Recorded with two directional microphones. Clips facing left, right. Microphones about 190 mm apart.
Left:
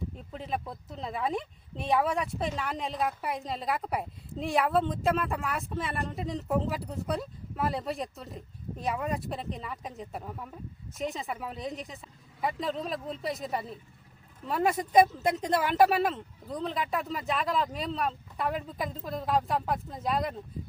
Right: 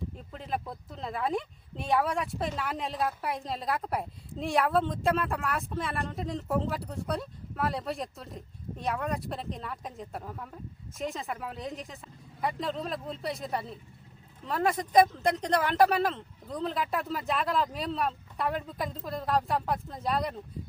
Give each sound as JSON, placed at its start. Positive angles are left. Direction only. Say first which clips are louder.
{"t": 0.3, "sound": "speech", "louder": "even", "side_deg": 0}